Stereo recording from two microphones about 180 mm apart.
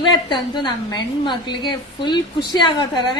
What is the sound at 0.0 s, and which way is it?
A woman's voice, 25° left (ahead or behind).